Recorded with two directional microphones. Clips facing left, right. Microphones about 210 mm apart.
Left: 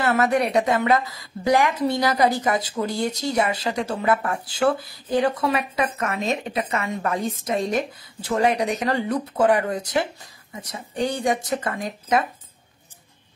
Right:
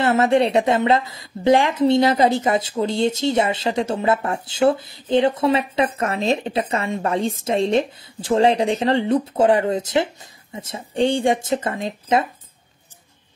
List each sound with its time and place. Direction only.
0.0 s a woman's voice: 25° right (ahead or behind)